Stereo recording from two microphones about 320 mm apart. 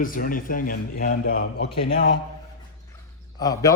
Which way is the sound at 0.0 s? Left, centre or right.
Left.